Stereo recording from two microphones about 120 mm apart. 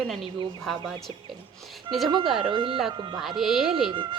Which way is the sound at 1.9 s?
Centre (ahead or behind).